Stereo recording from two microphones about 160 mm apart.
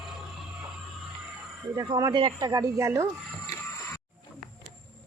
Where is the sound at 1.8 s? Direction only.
25° right (ahead or behind).